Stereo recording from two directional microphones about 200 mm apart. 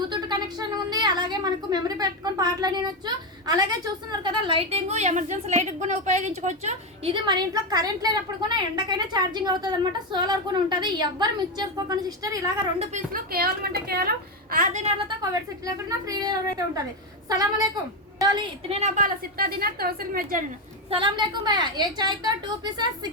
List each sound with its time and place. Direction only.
0.1 s a sound: 20° right (ahead or behind)
3.4 s a woman's voice: 20° right (ahead or behind)
13.1 s a woman's voice: 50° right (ahead or behind); by 15.1 s 30° right (ahead or behind)
15.2 s a woman's voice: 15° right (ahead or behind)
18.8 s a woman's voice: 40° right (ahead or behind)
20.9 s a woman's voice: 25° right (ahead or behind)